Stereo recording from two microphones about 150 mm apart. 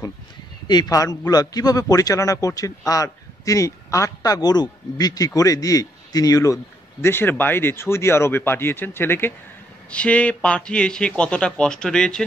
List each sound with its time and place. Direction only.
0.7 s a man's voice: 25° left (ahead or behind); by 12.3 s 5° left (ahead or behind)